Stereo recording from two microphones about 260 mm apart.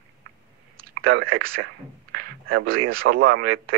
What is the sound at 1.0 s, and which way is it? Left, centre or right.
Speech, right.